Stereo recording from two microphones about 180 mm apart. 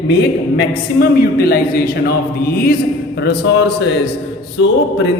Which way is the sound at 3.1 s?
70° left (ahead or behind).